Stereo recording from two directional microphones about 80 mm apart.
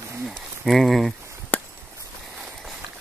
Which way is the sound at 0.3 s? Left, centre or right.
Centre.